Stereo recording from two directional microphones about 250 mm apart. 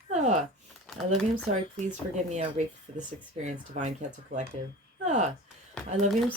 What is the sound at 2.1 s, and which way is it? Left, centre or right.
Speech, right.